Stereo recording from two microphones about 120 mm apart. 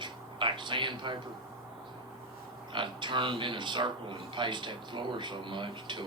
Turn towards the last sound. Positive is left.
turn(degrees=-40)  # may be behind; listen again after turning